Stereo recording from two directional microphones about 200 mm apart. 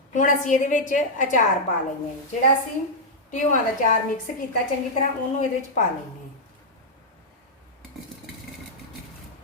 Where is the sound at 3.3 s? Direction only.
40° left (ahead or behind).